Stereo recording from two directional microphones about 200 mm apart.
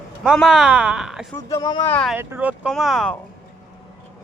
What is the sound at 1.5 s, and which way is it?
Speech, 20° left (ahead or behind).